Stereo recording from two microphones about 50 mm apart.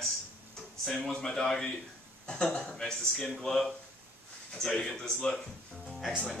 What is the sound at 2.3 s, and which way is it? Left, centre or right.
Speech, centre.